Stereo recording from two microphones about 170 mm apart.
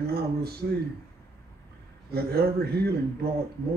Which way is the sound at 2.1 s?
65° right (ahead or behind).